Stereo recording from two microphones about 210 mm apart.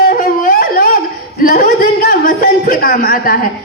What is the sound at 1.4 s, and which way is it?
A man's voice, 40° left (ahead or behind).